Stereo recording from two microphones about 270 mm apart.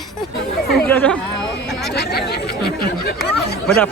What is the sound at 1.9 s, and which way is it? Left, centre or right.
Speech, left.